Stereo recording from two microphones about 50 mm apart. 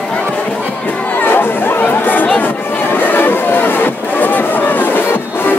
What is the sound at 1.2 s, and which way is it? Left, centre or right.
Chatter, left.